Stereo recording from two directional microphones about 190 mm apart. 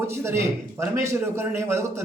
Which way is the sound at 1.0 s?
15° right (ahead or behind).